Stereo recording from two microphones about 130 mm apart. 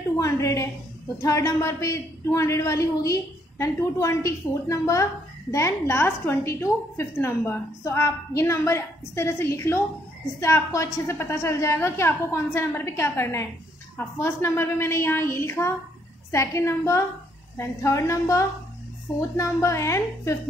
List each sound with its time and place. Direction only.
0.2 s a woman's voice: 25° left (ahead or behind)